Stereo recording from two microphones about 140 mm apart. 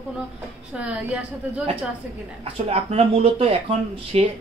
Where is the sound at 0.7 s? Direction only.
10° right (ahead or behind).